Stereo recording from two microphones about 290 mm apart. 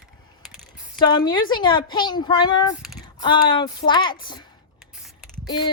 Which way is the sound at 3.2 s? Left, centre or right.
Centre.